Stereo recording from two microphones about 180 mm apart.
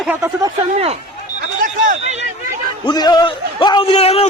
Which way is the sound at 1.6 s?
45° right (ahead or behind).